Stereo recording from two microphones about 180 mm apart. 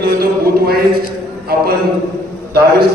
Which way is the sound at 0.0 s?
55° right (ahead or behind).